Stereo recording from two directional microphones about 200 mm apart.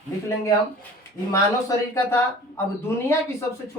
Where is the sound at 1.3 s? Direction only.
15° left (ahead or behind).